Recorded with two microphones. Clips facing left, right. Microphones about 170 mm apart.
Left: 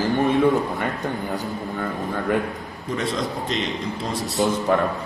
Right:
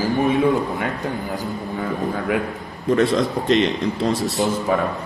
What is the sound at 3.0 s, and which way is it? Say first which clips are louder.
Speech: right 6 dB; 70° right (ahead or behind).